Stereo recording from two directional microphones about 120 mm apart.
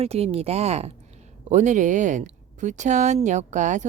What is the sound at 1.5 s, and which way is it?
Speech, 90° right.